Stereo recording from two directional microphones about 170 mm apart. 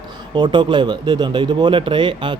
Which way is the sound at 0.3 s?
30° right (ahead or behind).